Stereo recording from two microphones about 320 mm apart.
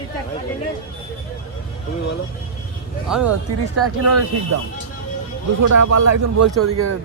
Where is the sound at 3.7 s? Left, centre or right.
Right.